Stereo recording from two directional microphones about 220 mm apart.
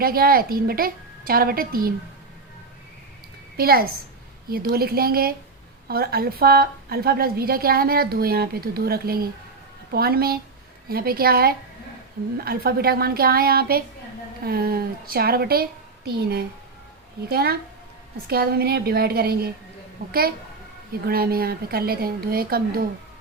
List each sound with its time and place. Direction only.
0.0 s a woman's voice: 40° right (ahead or behind)
3.6 s a woman's voice: 45° right (ahead or behind)
17.2 s a woman's voice: 45° right (ahead or behind)